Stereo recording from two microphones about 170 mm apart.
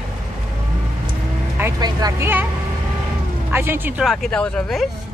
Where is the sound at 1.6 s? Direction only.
15° right (ahead or behind).